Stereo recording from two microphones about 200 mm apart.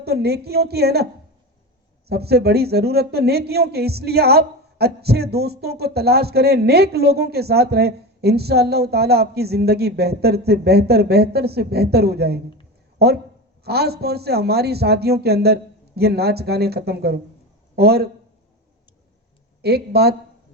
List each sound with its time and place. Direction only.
0.0 s speech: 55° right (ahead or behind)
2.0 s speech: 55° right (ahead or behind)
13.7 s speech: 55° right (ahead or behind)
19.6 s speech: 55° right (ahead or behind)